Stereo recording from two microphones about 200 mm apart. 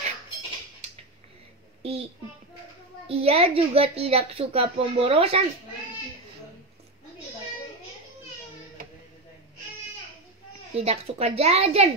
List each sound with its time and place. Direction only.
1.8 s a sound: 30° right (ahead or behind)
3.1 s a woman's voice: 30° right (ahead or behind)
10.7 s a woman's voice: 30° right (ahead or behind)